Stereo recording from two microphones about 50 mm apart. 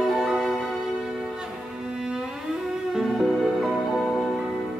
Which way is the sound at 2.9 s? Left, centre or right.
Centre.